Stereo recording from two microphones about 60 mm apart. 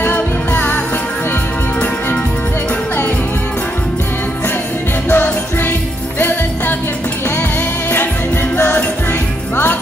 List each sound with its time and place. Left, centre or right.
0.0 s music: left
5.1 s music: left